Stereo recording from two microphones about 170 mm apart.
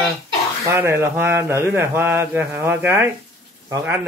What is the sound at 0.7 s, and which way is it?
Speech, 15° right (ahead or behind).